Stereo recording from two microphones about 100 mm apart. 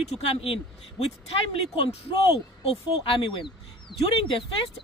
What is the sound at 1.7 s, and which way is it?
Speech, 70° left (ahead or behind).